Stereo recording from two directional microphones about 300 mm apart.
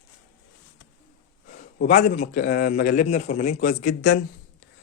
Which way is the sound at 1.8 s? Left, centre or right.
Left.